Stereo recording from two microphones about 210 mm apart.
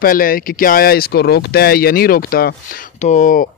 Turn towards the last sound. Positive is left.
turn(degrees=35)  # may be behind; listen again after turning